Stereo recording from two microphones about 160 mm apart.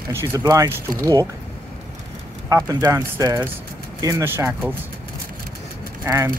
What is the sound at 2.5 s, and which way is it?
Speech, 20° right (ahead or behind).